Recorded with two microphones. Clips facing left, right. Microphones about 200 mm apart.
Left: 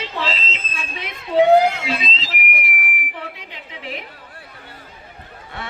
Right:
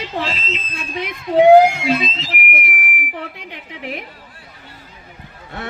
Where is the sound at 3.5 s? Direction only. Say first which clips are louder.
Right 3 dB; 55° right (ahead or behind).